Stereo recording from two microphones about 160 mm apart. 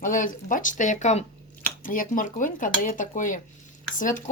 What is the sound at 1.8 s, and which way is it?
Speech, 60° left (ahead or behind).